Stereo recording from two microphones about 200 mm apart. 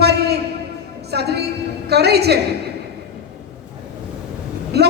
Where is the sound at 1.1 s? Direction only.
55° right (ahead or behind).